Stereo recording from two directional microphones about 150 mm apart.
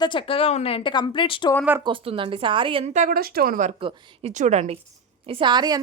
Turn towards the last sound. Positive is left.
turn(degrees=-25)  # may be behind; listen again after turning